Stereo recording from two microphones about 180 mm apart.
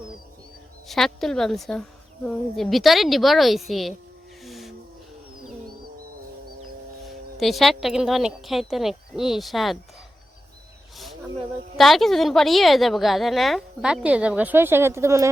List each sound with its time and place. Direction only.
0.9 s a woman's voice: centre (ahead or behind)
4.4 s hiss: centre (ahead or behind)
7.3 s a woman's voice: centre (ahead or behind)
11.8 s a woman's voice: centre (ahead or behind); by 15.3 s 15° right (ahead or behind)